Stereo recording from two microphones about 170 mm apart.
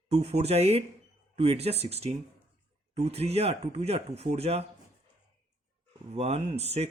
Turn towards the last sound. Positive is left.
turn(degrees=-40)  # may be behind; listen again after turning